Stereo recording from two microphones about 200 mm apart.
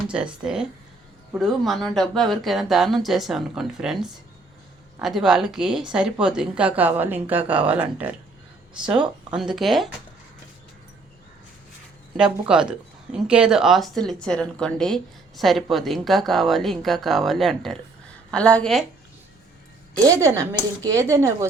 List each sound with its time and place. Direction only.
0.0 s speech: 5° right (ahead or behind)
12.1 s speech: 5° right (ahead or behind)
20.1 s speech: 15° right (ahead or behind)